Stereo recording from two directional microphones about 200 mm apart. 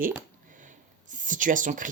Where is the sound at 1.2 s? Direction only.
40° right (ahead or behind).